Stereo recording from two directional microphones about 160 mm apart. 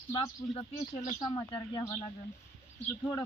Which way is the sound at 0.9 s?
55° left (ahead or behind).